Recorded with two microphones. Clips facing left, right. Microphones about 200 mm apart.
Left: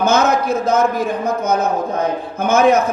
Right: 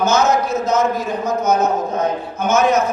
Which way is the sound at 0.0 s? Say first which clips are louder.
Left 1 dB; 55° left (ahead or behind).